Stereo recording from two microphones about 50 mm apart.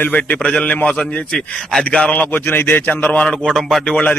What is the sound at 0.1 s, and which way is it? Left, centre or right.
Speech, left.